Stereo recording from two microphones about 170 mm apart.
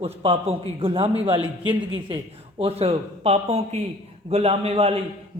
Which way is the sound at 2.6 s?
35° right (ahead or behind).